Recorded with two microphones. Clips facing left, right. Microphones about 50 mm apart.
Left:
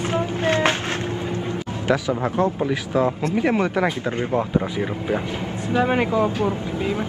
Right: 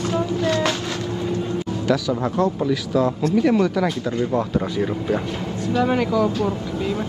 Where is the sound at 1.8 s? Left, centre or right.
Left.